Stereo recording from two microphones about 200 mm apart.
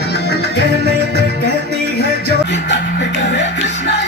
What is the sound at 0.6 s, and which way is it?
Music, 55° right (ahead or behind).